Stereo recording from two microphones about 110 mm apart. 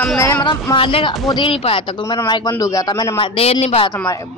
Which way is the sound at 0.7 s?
50° left (ahead or behind).